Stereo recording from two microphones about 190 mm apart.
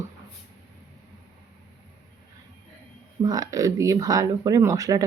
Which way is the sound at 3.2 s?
20° right (ahead or behind).